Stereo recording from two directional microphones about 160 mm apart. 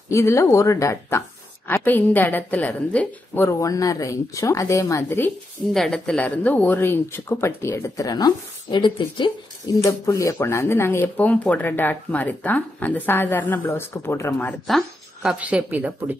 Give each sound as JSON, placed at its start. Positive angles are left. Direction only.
{"t": 0.1, "sound": "a woman's voice", "side_deg": 20}
{"t": 5.7, "sound": "speech", "side_deg": 5}
{"t": 9.8, "sound": "speech", "side_deg": 20}
{"t": 14.7, "sound": "speech", "side_deg": 0}